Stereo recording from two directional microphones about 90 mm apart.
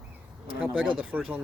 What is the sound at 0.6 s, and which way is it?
Speech, 10° right (ahead or behind).